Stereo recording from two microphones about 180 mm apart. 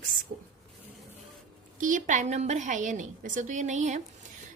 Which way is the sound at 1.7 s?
45° right (ahead or behind).